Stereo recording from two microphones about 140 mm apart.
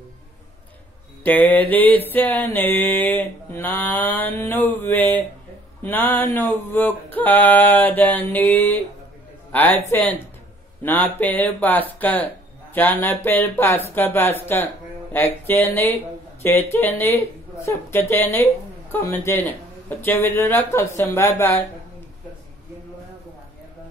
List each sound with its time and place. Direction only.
1.2 s a woman's voice: 10° left (ahead or behind)